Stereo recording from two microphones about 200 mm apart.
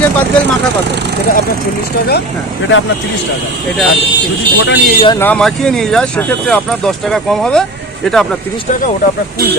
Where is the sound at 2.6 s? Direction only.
75° left (ahead or behind).